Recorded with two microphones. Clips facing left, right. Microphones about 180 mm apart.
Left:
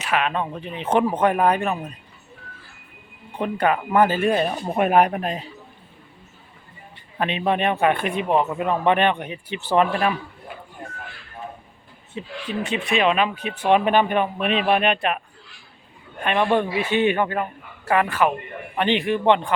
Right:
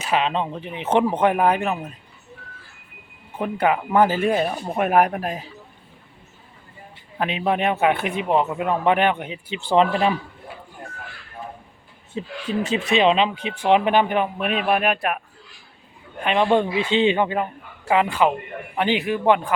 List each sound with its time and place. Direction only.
0.1 s a man's voice: 25° right (ahead or behind)
3.3 s speech: 10° right (ahead or behind)
7.2 s a man's voice: 5° right (ahead or behind)
9.6 s speech: 20° right (ahead or behind)
12.1 s speech: 35° right (ahead or behind)
13.3 s a man's voice: 10° right (ahead or behind)
16.2 s a man's voice: 15° right (ahead or behind)